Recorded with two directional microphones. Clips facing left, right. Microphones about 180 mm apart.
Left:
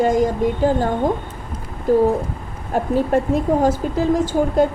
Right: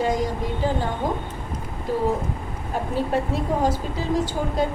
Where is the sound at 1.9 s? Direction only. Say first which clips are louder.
Left 10 dB; 45° left (ahead or behind).